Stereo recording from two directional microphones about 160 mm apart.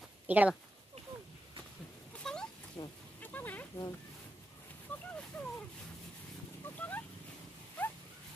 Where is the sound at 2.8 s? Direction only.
20° left (ahead or behind).